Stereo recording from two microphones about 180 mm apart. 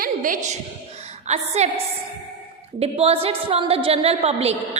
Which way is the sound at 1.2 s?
40° right (ahead or behind).